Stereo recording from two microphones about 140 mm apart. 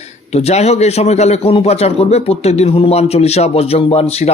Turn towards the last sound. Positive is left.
turn(degrees=45)  # may be behind; listen again after turning